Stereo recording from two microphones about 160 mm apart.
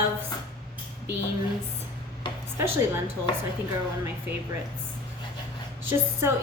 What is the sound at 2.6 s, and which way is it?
Speech, 15° right (ahead or behind).